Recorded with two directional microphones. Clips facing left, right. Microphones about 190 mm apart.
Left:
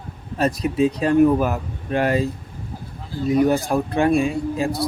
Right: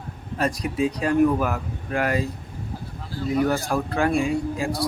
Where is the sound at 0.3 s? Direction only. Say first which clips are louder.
Left 4 dB; 25° left (ahead or behind).